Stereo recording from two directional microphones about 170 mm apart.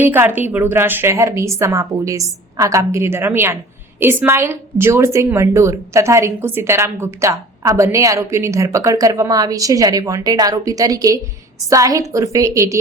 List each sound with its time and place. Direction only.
0.0 s a woman's voice: 10° right (ahead or behind)